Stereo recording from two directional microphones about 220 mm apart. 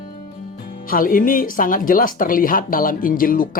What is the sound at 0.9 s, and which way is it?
Speech, 40° left (ahead or behind).